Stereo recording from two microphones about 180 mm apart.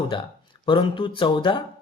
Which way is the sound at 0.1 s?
25° left (ahead or behind).